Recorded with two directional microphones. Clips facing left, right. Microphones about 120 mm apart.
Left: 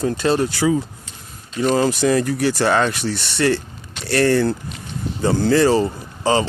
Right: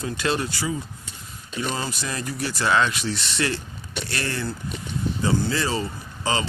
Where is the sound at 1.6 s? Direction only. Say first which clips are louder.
Left 13 dB; 50° left (ahead or behind).